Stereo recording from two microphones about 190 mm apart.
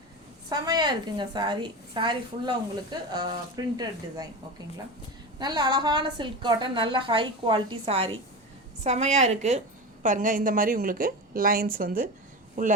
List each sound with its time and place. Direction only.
0.5 s a woman's voice: 20° right (ahead or behind)
5.4 s a woman's voice: 20° right (ahead or behind); by 12.0 s 50° right (ahead or behind)